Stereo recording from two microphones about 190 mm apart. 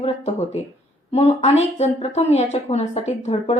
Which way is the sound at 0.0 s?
35° left (ahead or behind).